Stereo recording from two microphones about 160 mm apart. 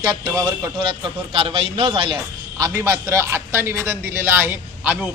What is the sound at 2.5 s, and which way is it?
A man's voice, 20° right (ahead or behind).